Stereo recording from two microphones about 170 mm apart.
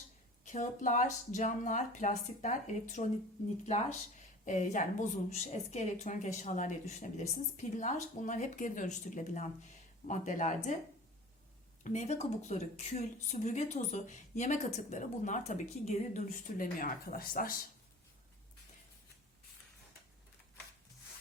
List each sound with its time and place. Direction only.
0.4 s a woman's voice: 45° left (ahead or behind)
4.4 s a woman's voice: 45° left (ahead or behind)
11.8 s a woman's voice: 45° left (ahead or behind)